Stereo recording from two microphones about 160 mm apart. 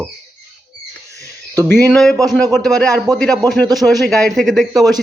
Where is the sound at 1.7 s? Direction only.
5° left (ahead or behind).